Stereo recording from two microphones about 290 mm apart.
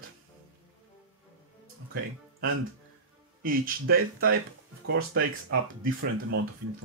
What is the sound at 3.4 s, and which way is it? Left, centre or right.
Speech, right.